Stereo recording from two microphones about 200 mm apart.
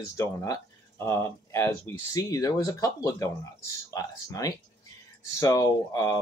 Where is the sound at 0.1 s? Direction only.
15° left (ahead or behind).